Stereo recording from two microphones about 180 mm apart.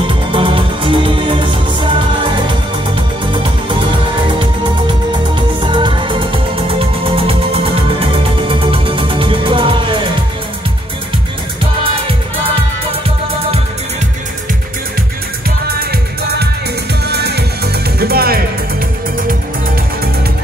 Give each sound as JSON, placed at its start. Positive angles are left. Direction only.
{"t": 0.0, "sound": "music", "side_deg": -30}
{"t": 5.3, "sound": "music", "side_deg": -25}
{"t": 15.8, "sound": "music", "side_deg": -60}